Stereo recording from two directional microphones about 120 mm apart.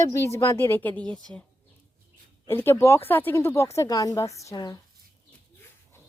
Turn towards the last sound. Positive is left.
turn(degrees=30)  # may be behind; listen again after turning